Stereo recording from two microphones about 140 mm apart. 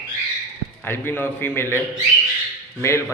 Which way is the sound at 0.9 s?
15° left (ahead or behind).